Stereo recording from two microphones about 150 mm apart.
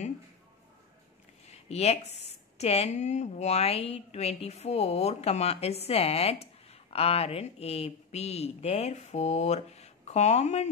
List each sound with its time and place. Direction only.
1.7 s a woman's voice: 45° left (ahead or behind)